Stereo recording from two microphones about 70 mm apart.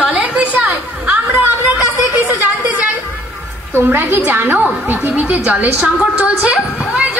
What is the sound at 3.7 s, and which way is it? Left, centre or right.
A woman's voice, right.